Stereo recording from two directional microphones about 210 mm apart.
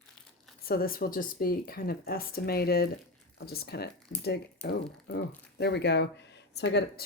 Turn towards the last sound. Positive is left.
turn(degrees=55)  # may be behind; listen again after turning